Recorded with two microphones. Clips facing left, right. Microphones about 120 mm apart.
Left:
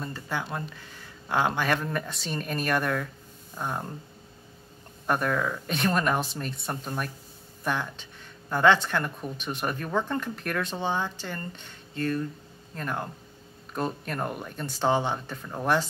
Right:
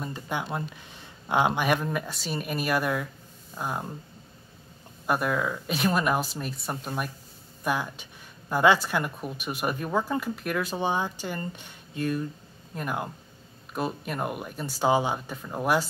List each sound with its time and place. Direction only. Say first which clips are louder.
0.0 s speech: right 1 dB; 15° right (ahead or behind)
5.0 s speech: even; 5° right (ahead or behind)